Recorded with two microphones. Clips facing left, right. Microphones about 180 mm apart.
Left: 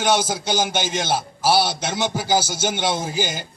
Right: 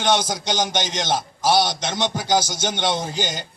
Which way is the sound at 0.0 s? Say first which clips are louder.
Left 1 dB; 5° left (ahead or behind).